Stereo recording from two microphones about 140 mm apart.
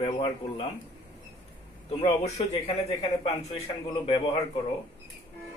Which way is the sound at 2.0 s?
50° left (ahead or behind).